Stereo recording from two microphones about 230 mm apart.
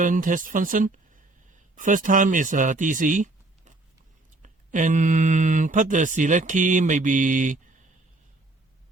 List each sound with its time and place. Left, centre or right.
0.0 s speech: right